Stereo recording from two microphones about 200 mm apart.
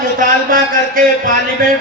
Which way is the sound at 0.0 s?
45° right (ahead or behind).